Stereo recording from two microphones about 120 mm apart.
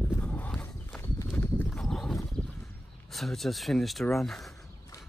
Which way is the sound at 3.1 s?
Centre (ahead or behind).